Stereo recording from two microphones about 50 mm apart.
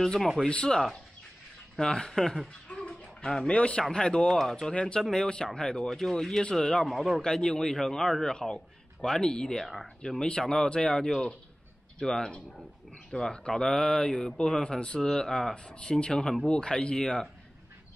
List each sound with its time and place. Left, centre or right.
0.0 s a man's voice: centre
0.5 s a man's voice: centre
2.4 s a sound: left
3.3 s a man's voice: centre
3.5 s speech: left
4.3 s speech: centre
4.6 s a man's voice: centre